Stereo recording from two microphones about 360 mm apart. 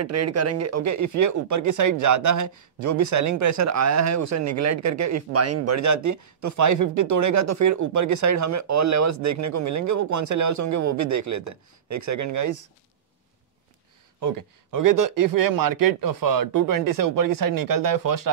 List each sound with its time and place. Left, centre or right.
0.0 s speech: right
14.2 s speech: right